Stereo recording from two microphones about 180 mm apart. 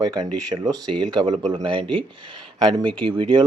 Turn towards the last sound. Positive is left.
turn(degrees=-25)  # may be behind; listen again after turning